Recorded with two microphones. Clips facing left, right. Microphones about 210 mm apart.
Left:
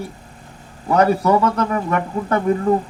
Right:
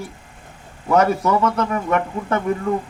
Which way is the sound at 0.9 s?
35° left (ahead or behind).